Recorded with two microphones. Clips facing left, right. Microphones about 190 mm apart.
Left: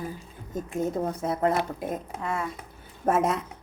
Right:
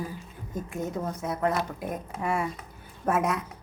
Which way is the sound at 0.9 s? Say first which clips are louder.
Left 3 dB; 30° left (ahead or behind).